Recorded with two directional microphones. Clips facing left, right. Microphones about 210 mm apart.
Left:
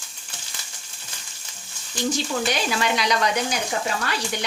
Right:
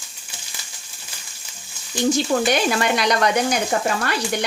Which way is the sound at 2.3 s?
50° right (ahead or behind).